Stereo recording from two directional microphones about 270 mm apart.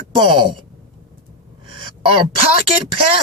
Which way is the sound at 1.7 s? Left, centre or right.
Centre.